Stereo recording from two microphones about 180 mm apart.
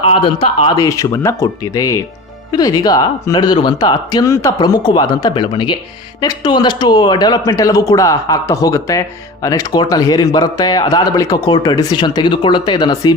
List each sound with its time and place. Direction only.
0.0 s speech: 30° left (ahead or behind)
0.8 s speech: 20° left (ahead or behind)